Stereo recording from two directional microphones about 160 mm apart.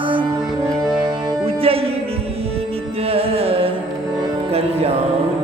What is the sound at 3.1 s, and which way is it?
Music, 35° right (ahead or behind).